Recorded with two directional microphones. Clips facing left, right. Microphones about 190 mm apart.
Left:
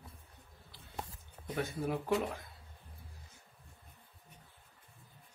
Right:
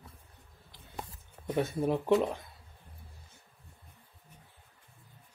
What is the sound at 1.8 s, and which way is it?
Speech, 25° right (ahead or behind).